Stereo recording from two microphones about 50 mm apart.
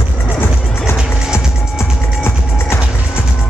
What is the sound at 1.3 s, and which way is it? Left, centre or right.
Music, left.